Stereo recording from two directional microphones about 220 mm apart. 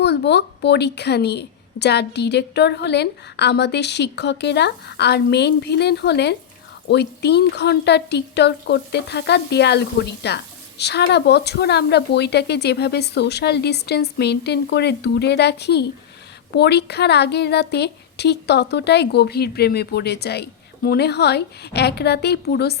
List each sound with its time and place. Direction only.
0.0 s a woman's voice: 50° left (ahead or behind)